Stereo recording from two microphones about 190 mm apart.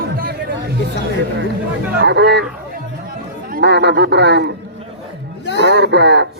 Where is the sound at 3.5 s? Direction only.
60° right (ahead or behind).